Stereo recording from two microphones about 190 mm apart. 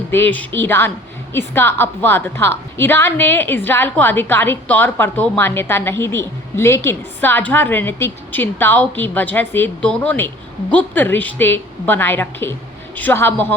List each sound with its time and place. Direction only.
0.1 s a woman's voice: 10° left (ahead or behind)